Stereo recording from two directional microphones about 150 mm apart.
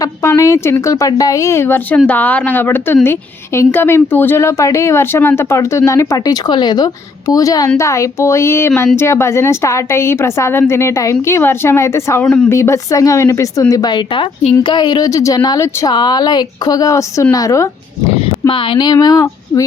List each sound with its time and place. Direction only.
0.0 s a woman's voice: 20° left (ahead or behind)
12.2 s speech: 5° left (ahead or behind)
12.5 s a woman's voice: 20° left (ahead or behind)
18.4 s a woman's voice: 35° left (ahead or behind)